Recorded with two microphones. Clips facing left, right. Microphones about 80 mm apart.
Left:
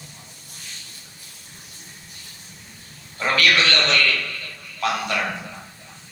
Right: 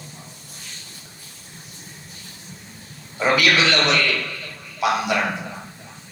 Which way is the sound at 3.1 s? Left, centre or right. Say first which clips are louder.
Right 2 dB; centre.